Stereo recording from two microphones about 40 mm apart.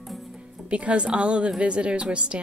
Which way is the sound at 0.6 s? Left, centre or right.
Right.